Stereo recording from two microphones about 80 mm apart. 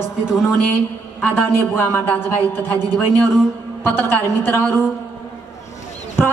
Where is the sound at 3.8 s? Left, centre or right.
Left.